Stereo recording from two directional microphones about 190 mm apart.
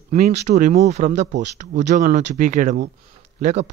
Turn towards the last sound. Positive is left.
turn(degrees=-40)  # may be behind; listen again after turning